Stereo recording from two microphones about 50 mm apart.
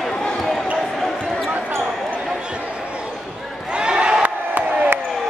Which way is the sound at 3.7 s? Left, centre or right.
Centre.